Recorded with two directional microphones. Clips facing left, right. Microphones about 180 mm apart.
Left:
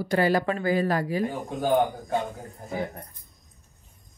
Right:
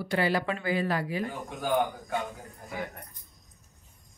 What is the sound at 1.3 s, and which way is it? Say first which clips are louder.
Speech: left 5 dB; 30° left (ahead or behind).